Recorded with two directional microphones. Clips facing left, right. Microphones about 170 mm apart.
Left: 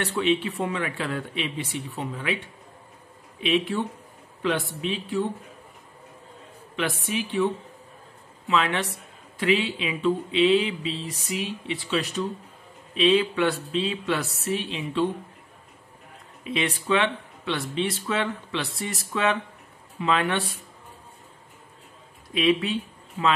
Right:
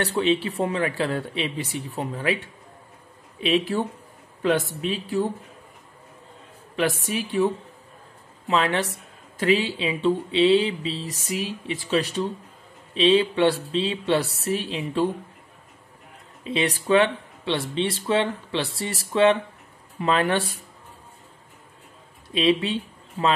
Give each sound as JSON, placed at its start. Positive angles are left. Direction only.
{"t": 0.2, "sound": "speech", "side_deg": -35}
{"t": 3.3, "sound": "speech", "side_deg": -35}
{"t": 6.8, "sound": "a woman's voice", "side_deg": -40}
{"t": 8.5, "sound": "speech", "side_deg": -35}
{"t": 16.4, "sound": "speech", "side_deg": -35}
{"t": 22.3, "sound": "speech", "side_deg": -30}